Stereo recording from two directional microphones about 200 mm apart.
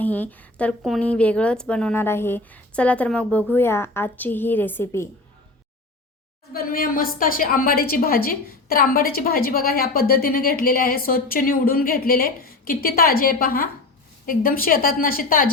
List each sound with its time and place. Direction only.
0.0 s a woman's voice: 10° left (ahead or behind)
6.5 s a woman's voice: 45° left (ahead or behind)